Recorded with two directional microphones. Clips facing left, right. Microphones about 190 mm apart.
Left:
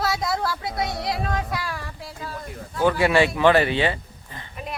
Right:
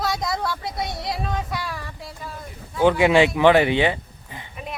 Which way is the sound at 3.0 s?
15° right (ahead or behind).